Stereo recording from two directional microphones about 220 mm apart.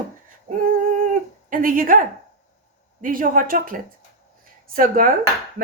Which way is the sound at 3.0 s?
40° right (ahead or behind).